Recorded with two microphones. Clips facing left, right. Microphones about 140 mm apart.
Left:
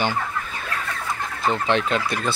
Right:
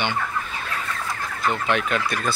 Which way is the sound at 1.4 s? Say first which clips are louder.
Left 2 dB; 30° left (ahead or behind).